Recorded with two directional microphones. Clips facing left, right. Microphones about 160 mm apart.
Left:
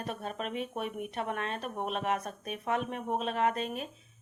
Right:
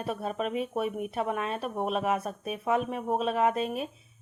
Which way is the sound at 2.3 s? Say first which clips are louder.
Right 5 dB; 40° right (ahead or behind).